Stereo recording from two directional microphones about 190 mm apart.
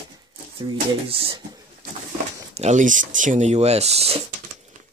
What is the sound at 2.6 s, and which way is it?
Speech, 40° right (ahead or behind).